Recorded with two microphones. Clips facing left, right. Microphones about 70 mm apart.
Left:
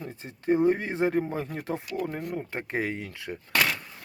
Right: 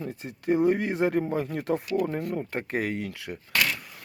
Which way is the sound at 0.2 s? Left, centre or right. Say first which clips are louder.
Even; left.